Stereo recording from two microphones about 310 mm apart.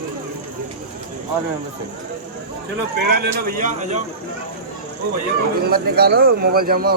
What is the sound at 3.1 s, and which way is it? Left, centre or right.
Speech, right.